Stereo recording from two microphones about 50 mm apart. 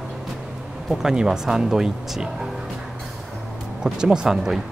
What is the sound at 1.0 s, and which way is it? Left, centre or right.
Speech, centre.